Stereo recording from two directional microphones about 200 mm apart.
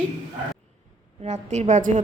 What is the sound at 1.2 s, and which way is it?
Speech, 35° right (ahead or behind).